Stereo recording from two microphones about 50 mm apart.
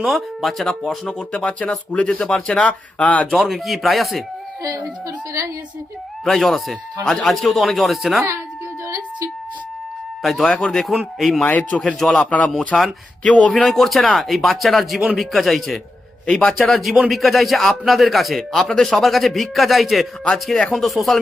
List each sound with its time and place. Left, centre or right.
0.1 s speech: centre; by 3.2 s left
3.2 s a man's voice: centre
6.2 s a man's voice: centre
10.4 s a man's voice: centre
11.7 s speech: left
11.9 s speech: centre
12.2 s speech: left
12.5 s a man's voice: centre
13.2 s speech: left
13.5 s a man's voice: centre
16.2 s a man's voice: centre
20.3 s speech: centre
20.7 s a man's voice: centre